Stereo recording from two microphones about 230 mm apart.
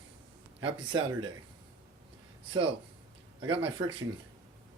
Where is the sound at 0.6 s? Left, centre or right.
Right.